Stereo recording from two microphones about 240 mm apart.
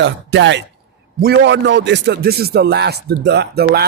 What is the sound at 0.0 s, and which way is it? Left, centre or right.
A man's voice, right.